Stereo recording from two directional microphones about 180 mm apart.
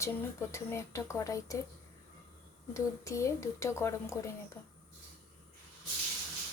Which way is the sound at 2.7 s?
15° left (ahead or behind).